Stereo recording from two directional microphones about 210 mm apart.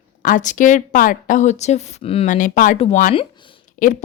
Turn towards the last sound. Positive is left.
turn(degrees=40)  # may be behind; listen again after turning